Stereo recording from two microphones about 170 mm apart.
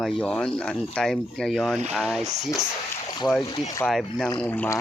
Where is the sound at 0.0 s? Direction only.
5° left (ahead or behind).